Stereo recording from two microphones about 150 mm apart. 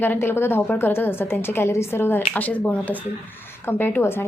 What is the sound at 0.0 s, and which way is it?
A woman's voice, 15° left (ahead or behind).